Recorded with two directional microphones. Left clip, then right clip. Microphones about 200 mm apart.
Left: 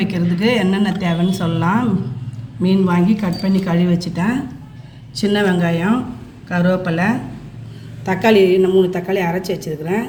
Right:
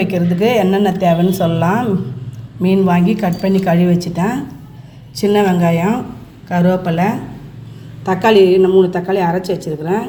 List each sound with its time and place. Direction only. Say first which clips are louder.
0.0 s a woman's voice: right 4 dB; 15° right (ahead or behind)
2.6 s a woman's voice: right 3 dB; 25° right (ahead or behind)